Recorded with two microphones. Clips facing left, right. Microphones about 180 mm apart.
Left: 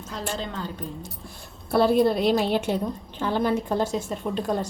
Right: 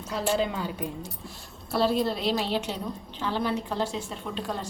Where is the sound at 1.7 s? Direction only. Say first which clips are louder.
Left 6 dB; 55° left (ahead or behind).